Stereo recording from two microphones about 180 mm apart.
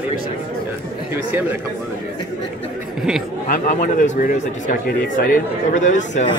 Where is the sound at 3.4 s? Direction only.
45° left (ahead or behind).